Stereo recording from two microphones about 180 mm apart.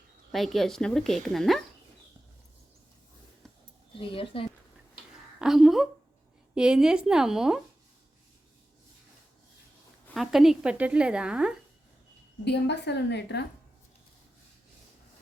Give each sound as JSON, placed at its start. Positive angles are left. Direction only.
{"t": 0.3, "sound": "a woman's voice", "side_deg": 0}
{"t": 4.0, "sound": "speech", "side_deg": 30}
{"t": 5.4, "sound": "a sound", "side_deg": 0}
{"t": 6.5, "sound": "a woman's voice", "side_deg": -5}
{"t": 10.2, "sound": "a woman's voice", "side_deg": 0}
{"t": 12.5, "sound": "a woman's voice", "side_deg": 70}